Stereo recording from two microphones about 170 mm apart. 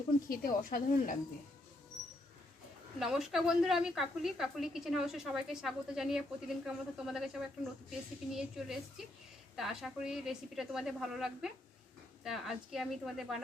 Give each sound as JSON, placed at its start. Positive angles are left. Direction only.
{"t": 0.3, "sound": "a woman's voice", "side_deg": 55}
{"t": 3.0, "sound": "a woman's voice", "side_deg": 0}